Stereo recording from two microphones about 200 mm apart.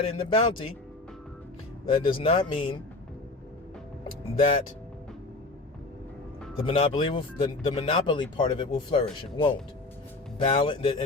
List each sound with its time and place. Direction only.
0.1 s speech: 30° left (ahead or behind)
2.1 s speech: 25° left (ahead or behind)
4.4 s speech: 40° left (ahead or behind)
6.7 s speech: 30° left (ahead or behind)